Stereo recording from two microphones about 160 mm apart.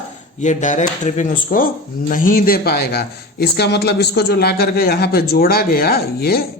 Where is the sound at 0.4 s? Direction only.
50° left (ahead or behind); by 3.1 s 80° left.